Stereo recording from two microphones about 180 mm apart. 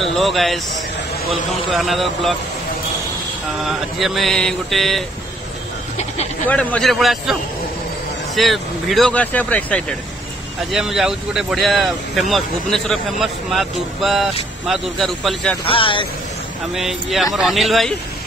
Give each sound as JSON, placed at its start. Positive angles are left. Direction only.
{"t": 0.2, "sound": "speech", "side_deg": 0}
{"t": 1.7, "sound": "speech", "side_deg": 0}
{"t": 3.6, "sound": "speech", "side_deg": 0}
{"t": 6.4, "sound": "speech", "side_deg": 5}
{"t": 8.4, "sound": "speech", "side_deg": 0}
{"t": 15.6, "sound": "speech", "side_deg": 30}
{"t": 16.7, "sound": "speech", "side_deg": 0}